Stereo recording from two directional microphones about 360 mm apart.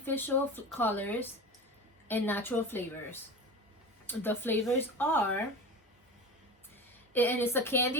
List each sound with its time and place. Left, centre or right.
0.0 s speech: centre
7.1 s speech: centre